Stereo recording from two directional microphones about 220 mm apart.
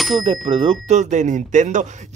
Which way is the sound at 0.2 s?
25° right (ahead or behind).